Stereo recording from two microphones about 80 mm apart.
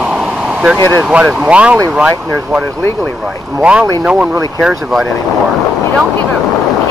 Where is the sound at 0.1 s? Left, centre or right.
Centre.